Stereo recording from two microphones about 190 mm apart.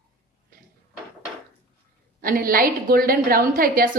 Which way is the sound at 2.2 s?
50° right (ahead or behind).